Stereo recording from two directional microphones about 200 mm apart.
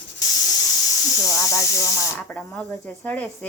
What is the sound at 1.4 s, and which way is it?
Speech, 15° left (ahead or behind).